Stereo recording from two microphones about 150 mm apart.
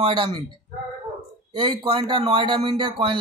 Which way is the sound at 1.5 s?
30° right (ahead or behind).